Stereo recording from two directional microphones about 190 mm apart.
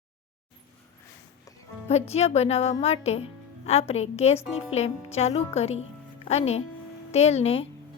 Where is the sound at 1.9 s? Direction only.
35° left (ahead or behind).